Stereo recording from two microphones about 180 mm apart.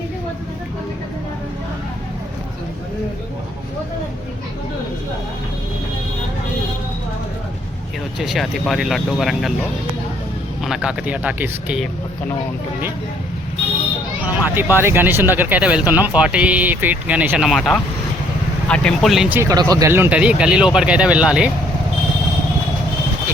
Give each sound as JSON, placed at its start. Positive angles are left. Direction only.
{"t": 8.2, "sound": "speech", "side_deg": 0}
{"t": 10.6, "sound": "speech", "side_deg": -5}
{"t": 14.5, "sound": "speech", "side_deg": -10}
{"t": 19.4, "sound": "speech", "side_deg": -20}